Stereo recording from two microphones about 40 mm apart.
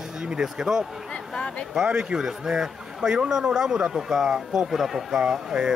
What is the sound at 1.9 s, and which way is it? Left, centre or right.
Speech, right.